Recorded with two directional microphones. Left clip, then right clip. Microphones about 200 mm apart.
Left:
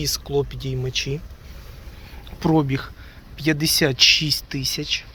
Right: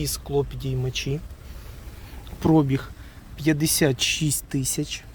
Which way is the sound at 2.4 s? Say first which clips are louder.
Even; 25° right (ahead or behind).